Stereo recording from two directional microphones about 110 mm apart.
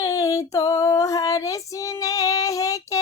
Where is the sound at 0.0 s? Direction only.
30° left (ahead or behind).